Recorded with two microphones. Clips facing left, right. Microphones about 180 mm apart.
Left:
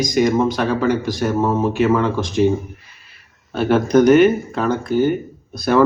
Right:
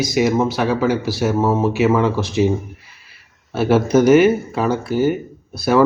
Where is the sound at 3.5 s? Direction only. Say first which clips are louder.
Even; 5° right (ahead or behind).